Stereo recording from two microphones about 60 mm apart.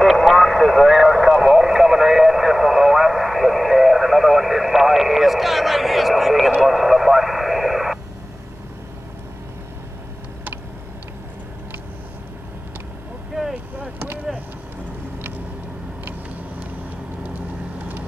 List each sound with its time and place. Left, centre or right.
0.0 s radio: centre
13.3 s vehicle: centre
13.7 s vehicle: right